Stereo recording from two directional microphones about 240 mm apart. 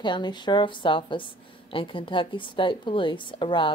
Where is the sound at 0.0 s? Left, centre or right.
Centre.